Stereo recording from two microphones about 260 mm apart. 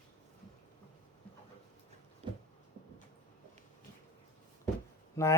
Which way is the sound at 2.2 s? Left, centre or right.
Right.